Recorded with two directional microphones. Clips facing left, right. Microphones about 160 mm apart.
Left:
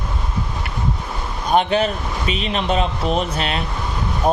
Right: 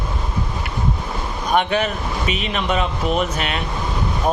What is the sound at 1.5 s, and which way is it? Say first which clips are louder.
A man's voice: left 2 dB; 30° left (ahead or behind).